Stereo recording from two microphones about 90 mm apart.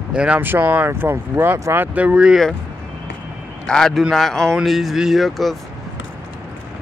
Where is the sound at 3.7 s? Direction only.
5° left (ahead or behind).